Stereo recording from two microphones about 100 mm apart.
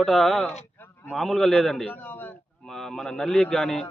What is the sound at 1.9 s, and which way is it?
Speech, 20° left (ahead or behind).